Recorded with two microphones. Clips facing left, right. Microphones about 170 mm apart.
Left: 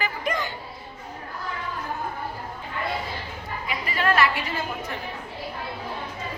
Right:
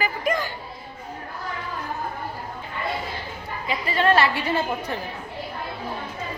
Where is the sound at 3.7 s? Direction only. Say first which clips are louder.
Right 4 dB; 30° right (ahead or behind).